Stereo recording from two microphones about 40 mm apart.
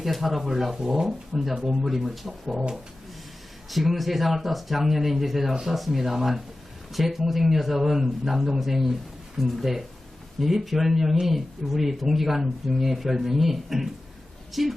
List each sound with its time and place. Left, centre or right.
0.0 s speech: centre
2.5 s speech: centre
3.7 s speech: centre